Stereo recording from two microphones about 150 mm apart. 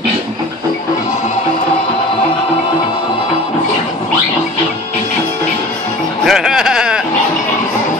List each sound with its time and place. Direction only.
6.2 s bleat: 5° right (ahead or behind)